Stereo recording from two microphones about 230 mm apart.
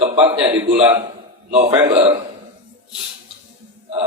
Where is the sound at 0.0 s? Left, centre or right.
Right.